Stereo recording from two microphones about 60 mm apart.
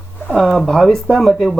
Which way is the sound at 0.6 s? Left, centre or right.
Centre.